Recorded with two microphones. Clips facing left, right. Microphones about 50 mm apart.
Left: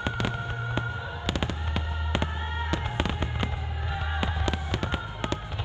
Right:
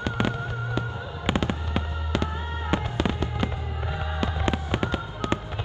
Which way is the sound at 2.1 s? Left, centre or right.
Left.